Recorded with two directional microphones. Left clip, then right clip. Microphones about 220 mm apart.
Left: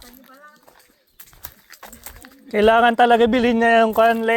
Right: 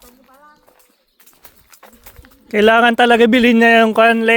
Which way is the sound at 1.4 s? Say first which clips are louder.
Left 3 dB; 55° left (ahead or behind).